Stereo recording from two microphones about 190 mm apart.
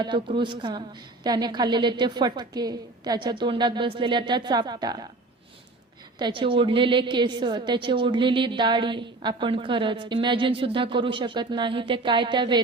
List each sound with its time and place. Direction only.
0.0 s a woman's voice: 25° right (ahead or behind)
6.1 s a woman's voice: 25° right (ahead or behind)